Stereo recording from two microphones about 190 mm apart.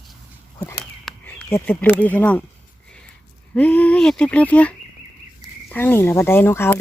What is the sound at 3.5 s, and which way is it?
Speech, 5° left (ahead or behind).